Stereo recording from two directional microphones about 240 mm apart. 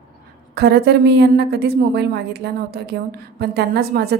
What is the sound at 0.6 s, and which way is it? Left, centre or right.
A woman's voice, right.